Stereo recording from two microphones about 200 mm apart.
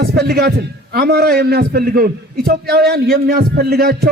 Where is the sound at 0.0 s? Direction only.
50° right (ahead or behind).